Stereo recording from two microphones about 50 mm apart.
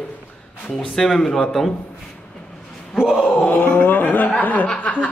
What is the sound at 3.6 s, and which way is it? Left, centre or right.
Speech, left.